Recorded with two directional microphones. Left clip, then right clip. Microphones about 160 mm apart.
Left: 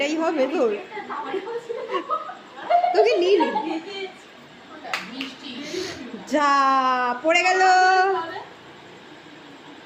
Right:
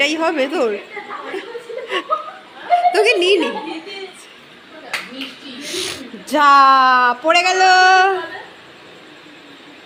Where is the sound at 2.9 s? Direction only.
15° right (ahead or behind).